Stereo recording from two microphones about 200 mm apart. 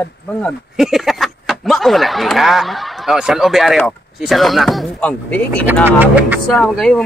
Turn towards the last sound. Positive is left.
turn(degrees=5)  # may be behind; listen again after turning